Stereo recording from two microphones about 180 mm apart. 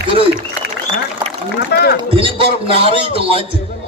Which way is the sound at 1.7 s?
60° left (ahead or behind).